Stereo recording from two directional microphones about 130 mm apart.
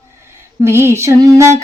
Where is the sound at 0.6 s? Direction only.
20° right (ahead or behind).